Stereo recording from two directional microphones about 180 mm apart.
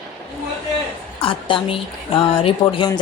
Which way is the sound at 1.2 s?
30° left (ahead or behind).